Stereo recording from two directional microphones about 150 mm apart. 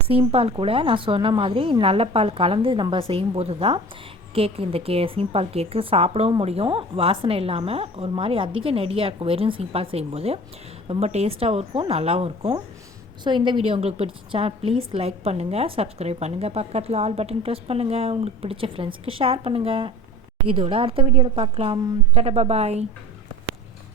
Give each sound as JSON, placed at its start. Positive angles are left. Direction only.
{"t": 0.1, "sound": "a woman's voice", "side_deg": -40}